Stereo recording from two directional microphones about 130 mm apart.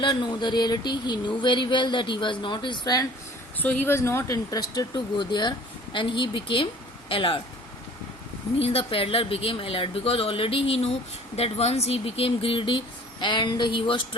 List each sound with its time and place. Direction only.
0.0 s speech: 35° left (ahead or behind)
3.6 s speech: 15° left (ahead or behind); by 7.4 s 40° left (ahead or behind)
8.5 s speech: 45° left (ahead or behind)